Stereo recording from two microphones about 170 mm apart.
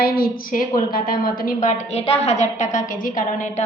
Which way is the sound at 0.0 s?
60° left (ahead or behind).